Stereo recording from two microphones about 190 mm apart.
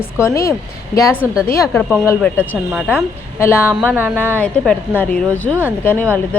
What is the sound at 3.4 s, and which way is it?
Speech, 15° left (ahead or behind).